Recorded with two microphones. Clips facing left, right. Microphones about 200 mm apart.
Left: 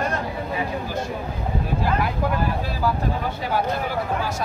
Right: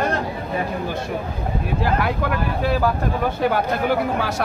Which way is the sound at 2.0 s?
65° right (ahead or behind).